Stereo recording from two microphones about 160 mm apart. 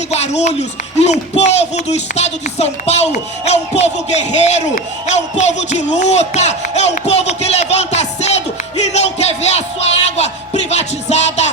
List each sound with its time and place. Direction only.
0.1 s speech: 45° left (ahead or behind)